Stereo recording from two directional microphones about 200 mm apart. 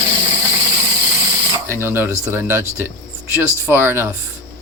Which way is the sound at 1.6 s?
10° right (ahead or behind).